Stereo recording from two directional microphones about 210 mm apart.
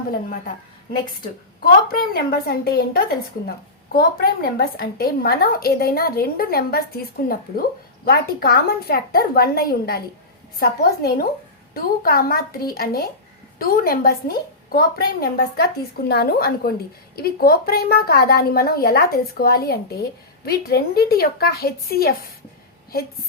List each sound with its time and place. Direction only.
0.1 s a woman's voice: 40° left (ahead or behind)
1.9 s a woman's voice: 45° left (ahead or behind)